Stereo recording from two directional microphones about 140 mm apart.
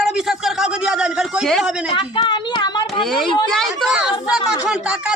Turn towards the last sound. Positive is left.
turn(degrees=-5)  # may be behind; listen again after turning